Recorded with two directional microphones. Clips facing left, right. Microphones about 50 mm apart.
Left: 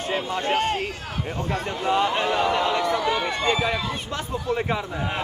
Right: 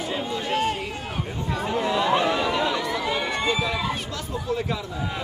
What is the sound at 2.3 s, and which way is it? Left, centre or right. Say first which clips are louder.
Chatter: left 2 dB; left.